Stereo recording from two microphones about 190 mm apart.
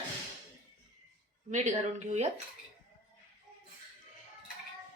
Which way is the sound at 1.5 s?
40° right (ahead or behind).